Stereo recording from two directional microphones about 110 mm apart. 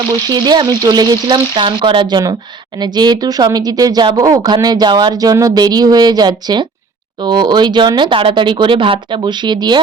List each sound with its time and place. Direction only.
0.3 s speech: 40° right (ahead or behind)